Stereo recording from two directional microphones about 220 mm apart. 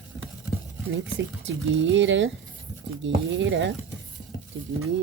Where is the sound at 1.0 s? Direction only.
60° right (ahead or behind).